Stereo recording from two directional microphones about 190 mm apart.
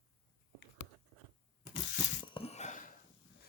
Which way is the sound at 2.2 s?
30° left (ahead or behind).